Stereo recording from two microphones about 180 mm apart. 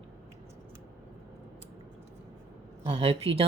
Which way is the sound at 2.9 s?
30° right (ahead or behind).